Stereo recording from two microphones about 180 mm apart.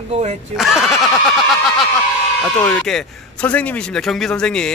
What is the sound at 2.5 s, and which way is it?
A man's voice, 10° left (ahead or behind).